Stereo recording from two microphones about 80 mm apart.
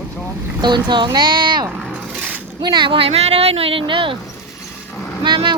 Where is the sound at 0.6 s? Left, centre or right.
Right.